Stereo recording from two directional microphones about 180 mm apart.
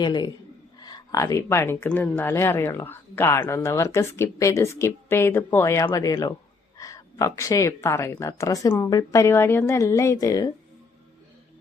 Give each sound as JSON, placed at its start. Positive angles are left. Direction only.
{"t": 0.0, "sound": "a man's voice", "side_deg": 25}